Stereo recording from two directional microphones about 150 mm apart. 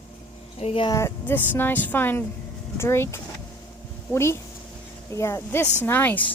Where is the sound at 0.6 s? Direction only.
40° left (ahead or behind).